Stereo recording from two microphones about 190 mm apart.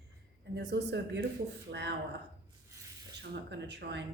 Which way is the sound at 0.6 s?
65° right (ahead or behind).